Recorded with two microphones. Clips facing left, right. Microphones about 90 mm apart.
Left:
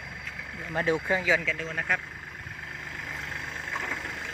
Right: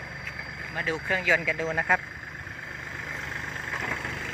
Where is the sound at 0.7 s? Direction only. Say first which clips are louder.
Left 3 dB; 25° left (ahead or behind).